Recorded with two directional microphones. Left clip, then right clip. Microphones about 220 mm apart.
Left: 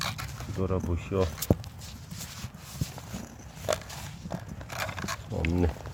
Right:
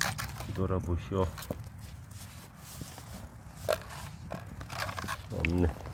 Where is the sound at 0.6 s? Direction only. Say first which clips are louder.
Left 3 dB; 5° left (ahead or behind).